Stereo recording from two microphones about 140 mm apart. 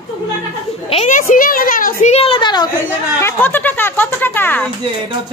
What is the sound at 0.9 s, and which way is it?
A child's voice, 60° left (ahead or behind).